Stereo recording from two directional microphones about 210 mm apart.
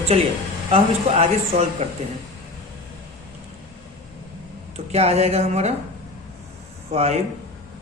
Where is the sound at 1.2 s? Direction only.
30° right (ahead or behind).